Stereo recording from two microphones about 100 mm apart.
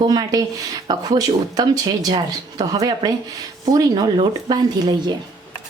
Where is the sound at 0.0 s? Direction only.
45° right (ahead or behind).